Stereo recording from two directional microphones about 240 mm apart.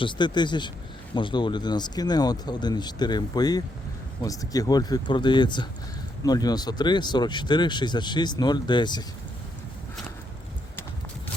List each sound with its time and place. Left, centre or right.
0.0 s speech: centre